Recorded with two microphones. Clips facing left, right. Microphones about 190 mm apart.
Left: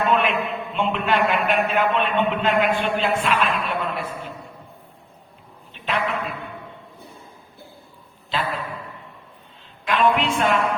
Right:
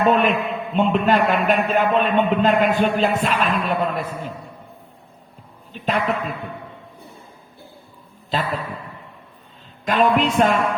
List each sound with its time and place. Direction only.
0.0 s a man's voice: 40° right (ahead or behind)
5.7 s a man's voice: 40° right (ahead or behind)
8.3 s a man's voice: 40° right (ahead or behind)
9.8 s a man's voice: 40° right (ahead or behind)